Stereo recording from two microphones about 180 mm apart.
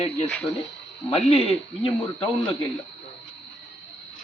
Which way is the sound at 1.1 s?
35° left (ahead or behind).